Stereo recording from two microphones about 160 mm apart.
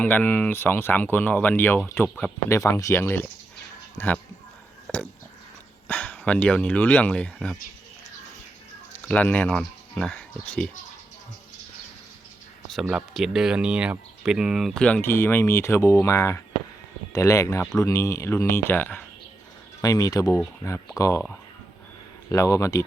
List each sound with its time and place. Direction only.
0.0 s speech: 10° left (ahead or behind)
4.9 s a sound: 5° left (ahead or behind)
5.9 s speech: 10° left (ahead or behind)
9.0 s speech: 10° left (ahead or behind)
12.8 s speech: 10° right (ahead or behind); by 21.2 s 20° left (ahead or behind)
22.3 s speech: 20° left (ahead or behind)